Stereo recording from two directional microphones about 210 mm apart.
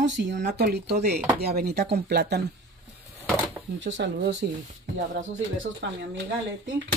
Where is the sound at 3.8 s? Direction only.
60° right (ahead or behind).